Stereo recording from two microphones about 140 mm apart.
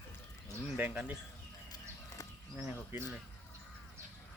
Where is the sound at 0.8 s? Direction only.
10° right (ahead or behind).